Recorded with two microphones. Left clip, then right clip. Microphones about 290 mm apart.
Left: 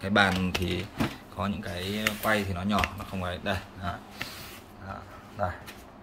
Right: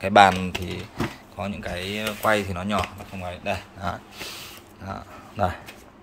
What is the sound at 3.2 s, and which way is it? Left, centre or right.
Speech, centre.